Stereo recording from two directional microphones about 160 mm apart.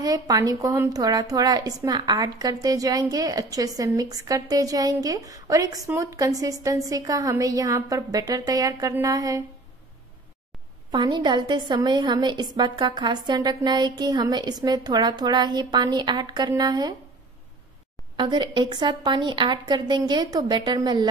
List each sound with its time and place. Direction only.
0.0 s a woman's voice: 20° right (ahead or behind)
10.9 s a woman's voice: 25° right (ahead or behind)
18.1 s a woman's voice: 30° right (ahead or behind)